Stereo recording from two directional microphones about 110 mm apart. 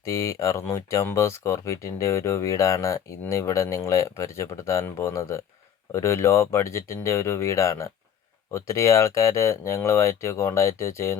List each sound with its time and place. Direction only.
0.0 s speech: 30° left (ahead or behind)